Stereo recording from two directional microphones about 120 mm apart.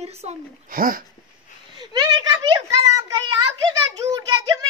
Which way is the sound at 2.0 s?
35° right (ahead or behind).